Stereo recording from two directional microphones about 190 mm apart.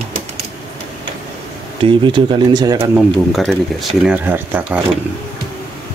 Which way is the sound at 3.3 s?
Centre (ahead or behind).